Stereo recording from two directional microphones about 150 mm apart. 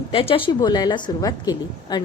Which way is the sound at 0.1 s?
35° left (ahead or behind).